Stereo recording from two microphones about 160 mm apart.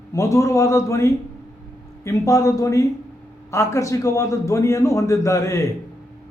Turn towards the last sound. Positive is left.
turn(degrees=20)  # may be behind; listen again after turning